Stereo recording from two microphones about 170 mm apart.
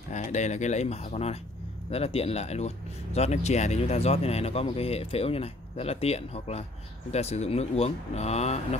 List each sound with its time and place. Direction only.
0.1 s speech: 45° left (ahead or behind)